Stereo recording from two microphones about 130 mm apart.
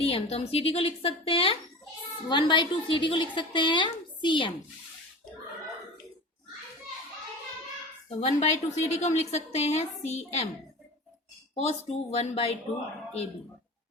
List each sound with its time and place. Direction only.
0.0 s a woman's voice: 50° left (ahead or behind)
8.1 s a woman's voice: 60° left (ahead or behind)
11.5 s speech: 55° left (ahead or behind)